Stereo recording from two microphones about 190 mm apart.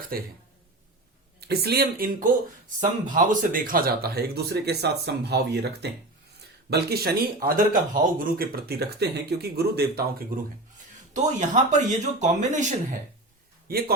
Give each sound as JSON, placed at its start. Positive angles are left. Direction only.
{"t": 0.1, "sound": "speech", "side_deg": -50}
{"t": 1.4, "sound": "speech", "side_deg": -55}
{"t": 11.1, "sound": "speech", "side_deg": -40}
{"t": 13.7, "sound": "a man's voice", "side_deg": -55}